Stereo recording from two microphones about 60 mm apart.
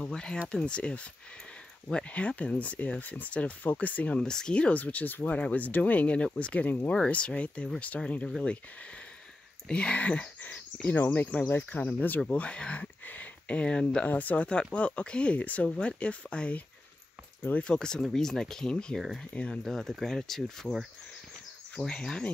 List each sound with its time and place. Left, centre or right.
0.0 s speech: centre
4.2 s speech: centre
9.7 s speech: centre
12.3 s speech: centre
13.0 s a sound: left
14.0 s speech: left
17.7 s speech: centre
21.7 s speech: centre